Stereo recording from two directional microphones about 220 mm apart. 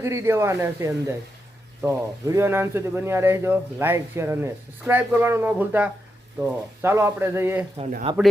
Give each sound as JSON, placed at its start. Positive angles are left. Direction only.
{"t": 0.0, "sound": "speech", "side_deg": -15}
{"t": 8.1, "sound": "a man's voice", "side_deg": -25}